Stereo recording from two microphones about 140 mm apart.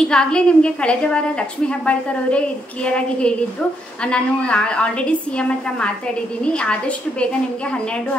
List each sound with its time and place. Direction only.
0.0 s a woman's voice: 5° left (ahead or behind)
6.4 s a woman's voice: 5° left (ahead or behind)